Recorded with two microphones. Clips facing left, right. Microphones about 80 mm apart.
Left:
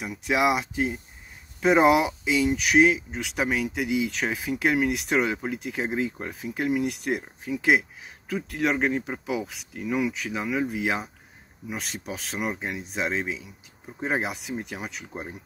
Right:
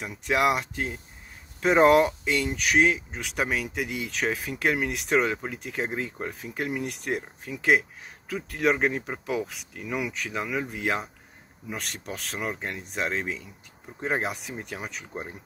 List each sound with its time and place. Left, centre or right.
0.0 s speech: centre